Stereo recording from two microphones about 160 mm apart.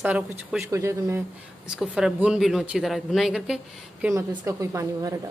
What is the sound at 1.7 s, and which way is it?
Speech, 5° right (ahead or behind).